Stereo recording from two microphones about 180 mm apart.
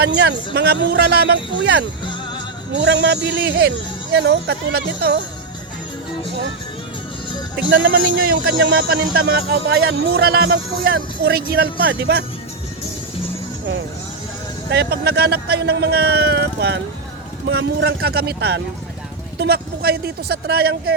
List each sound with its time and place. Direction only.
0.0 s speech: 65° right (ahead or behind)
7.9 s speech: 55° right (ahead or behind)
14.7 s speech: 65° right (ahead or behind)